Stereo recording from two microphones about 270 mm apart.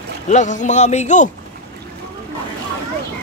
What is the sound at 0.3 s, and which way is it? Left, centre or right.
A man's voice, left.